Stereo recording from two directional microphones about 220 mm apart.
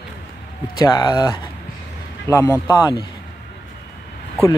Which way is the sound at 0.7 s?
15° left (ahead or behind).